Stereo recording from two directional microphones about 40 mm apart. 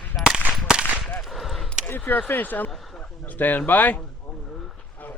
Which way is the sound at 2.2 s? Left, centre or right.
Left.